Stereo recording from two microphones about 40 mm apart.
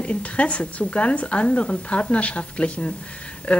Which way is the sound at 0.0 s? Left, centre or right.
Left.